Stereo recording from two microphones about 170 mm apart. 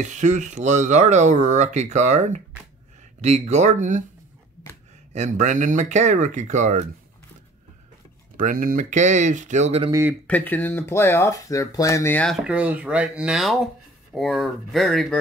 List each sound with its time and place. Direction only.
0.0 s speech: 45° right (ahead or behind)
5.1 s speech: 45° right (ahead or behind)
8.4 s speech: 50° right (ahead or behind)
9.8 s speech: 20° right (ahead or behind)
10.2 s speech: 10° left (ahead or behind)
12.4 s speech: 10° right (ahead or behind)